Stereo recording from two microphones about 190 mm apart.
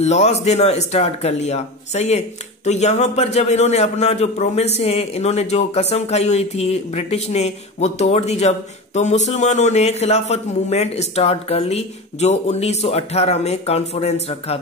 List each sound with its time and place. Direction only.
0.0 s speech: 35° left (ahead or behind)